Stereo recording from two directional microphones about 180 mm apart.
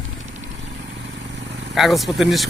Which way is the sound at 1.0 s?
75° right (ahead or behind).